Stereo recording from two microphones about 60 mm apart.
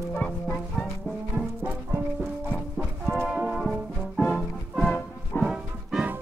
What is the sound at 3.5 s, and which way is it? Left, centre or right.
Brass instrument, centre.